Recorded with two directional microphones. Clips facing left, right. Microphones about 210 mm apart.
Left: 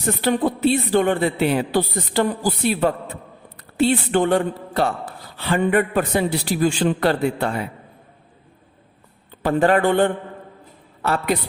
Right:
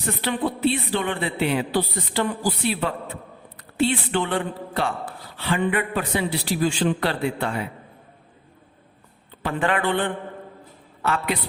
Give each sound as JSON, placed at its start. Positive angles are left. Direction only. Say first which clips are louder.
{"t": 0.0, "sound": "a woman's voice", "louder": "left 5 dB", "side_deg": 45}
{"t": 9.4, "sound": "speech", "louder": "left 7 dB", "side_deg": 40}